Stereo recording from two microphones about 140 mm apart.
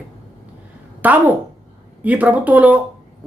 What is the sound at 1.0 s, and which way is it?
Speech, 10° right (ahead or behind).